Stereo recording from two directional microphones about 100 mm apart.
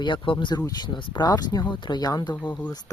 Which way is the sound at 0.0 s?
50° left (ahead or behind).